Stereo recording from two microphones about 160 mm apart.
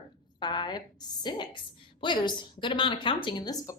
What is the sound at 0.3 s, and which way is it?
Speech, 25° left (ahead or behind).